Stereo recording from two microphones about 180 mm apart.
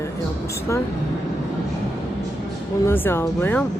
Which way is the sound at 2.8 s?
10° left (ahead or behind).